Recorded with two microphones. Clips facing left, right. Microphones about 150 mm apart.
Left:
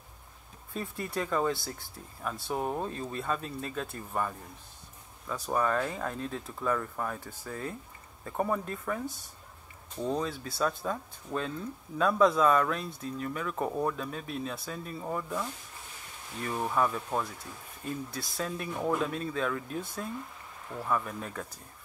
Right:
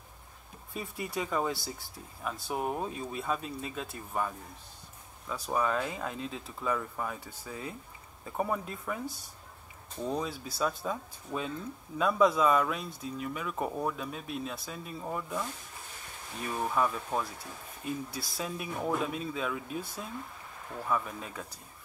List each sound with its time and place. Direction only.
0.7 s speech: 10° right (ahead or behind)
5.3 s speech: 5° right (ahead or behind)
16.4 s speech: 5° right (ahead or behind)